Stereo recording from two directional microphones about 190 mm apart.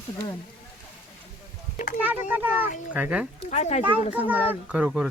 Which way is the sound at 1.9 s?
10° right (ahead or behind).